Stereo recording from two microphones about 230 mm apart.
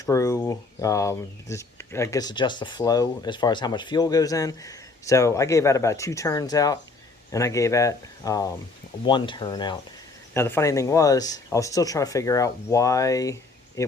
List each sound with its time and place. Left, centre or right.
0.0 s speech: centre